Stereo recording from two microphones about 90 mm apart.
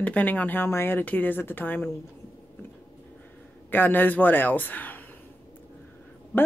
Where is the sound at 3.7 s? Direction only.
20° left (ahead or behind).